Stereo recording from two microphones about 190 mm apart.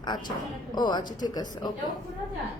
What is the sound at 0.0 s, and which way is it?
Speech, 20° left (ahead or behind).